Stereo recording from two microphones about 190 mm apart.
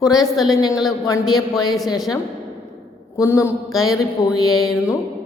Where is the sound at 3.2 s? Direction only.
15° left (ahead or behind).